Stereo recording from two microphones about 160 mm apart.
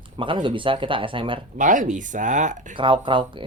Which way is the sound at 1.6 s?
55° right (ahead or behind).